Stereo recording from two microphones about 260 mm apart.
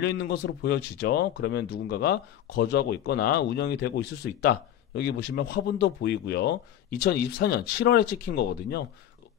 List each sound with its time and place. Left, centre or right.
0.0 s speech: left